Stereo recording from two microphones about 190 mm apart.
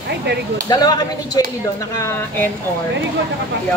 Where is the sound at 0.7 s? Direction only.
20° left (ahead or behind).